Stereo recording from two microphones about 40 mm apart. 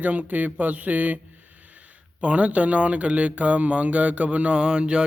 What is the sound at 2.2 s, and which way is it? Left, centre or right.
Speech, right.